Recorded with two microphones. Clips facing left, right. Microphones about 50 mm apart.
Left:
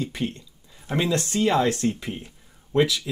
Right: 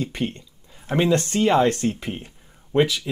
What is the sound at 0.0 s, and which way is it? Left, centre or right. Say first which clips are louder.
Speech: right 2 dB; centre.